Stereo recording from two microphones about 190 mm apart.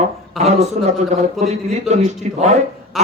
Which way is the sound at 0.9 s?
35° right (ahead or behind).